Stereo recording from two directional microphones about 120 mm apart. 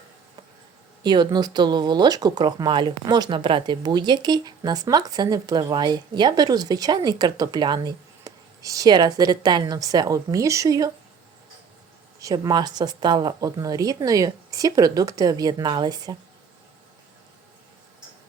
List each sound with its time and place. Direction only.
1.0 s speech: 35° right (ahead or behind)
12.2 s speech: 30° right (ahead or behind)